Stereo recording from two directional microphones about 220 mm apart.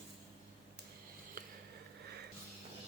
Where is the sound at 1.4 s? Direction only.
40° right (ahead or behind).